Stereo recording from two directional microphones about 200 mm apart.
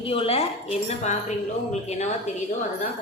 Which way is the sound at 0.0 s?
25° left (ahead or behind).